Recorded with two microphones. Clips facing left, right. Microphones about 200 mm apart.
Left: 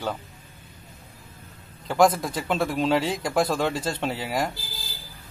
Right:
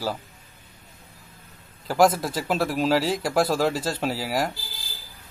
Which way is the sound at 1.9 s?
5° right (ahead or behind).